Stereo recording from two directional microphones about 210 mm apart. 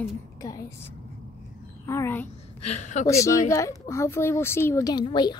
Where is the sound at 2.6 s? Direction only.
30° left (ahead or behind).